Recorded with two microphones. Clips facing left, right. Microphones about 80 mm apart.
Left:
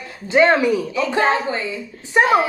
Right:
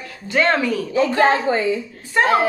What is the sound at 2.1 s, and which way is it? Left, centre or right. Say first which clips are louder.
Speech: left 1 dB; centre.